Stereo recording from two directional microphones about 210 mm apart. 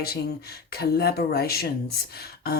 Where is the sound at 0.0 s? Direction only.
45° left (ahead or behind).